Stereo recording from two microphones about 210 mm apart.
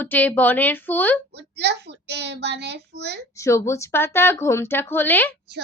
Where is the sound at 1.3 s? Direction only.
55° right (ahead or behind).